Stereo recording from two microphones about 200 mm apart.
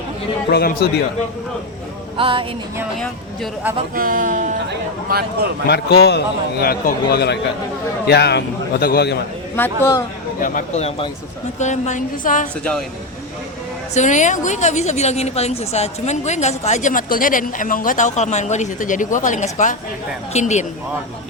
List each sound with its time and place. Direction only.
0.5 s a man's voice: 50° left (ahead or behind)
2.1 s a sound: 25° right (ahead or behind)
3.9 s speech: 45° right (ahead or behind)
4.7 s speech: 50° right (ahead or behind)
5.6 s a man's voice: 55° left (ahead or behind)
9.6 s speech: 10° left (ahead or behind)
10.4 s a woman's voice: 35° left (ahead or behind)
13.9 s a woman's voice: 35° left (ahead or behind)